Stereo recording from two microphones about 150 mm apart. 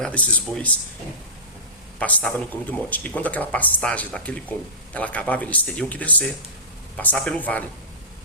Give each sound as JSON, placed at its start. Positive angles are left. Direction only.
{"t": 0.0, "sound": "speech", "side_deg": 10}
{"t": 2.0, "sound": "speech", "side_deg": 10}